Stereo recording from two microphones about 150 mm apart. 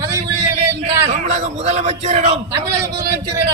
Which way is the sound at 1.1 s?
50° right (ahead or behind).